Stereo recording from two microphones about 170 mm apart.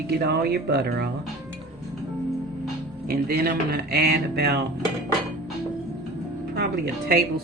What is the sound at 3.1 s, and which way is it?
Speech, 65° right (ahead or behind).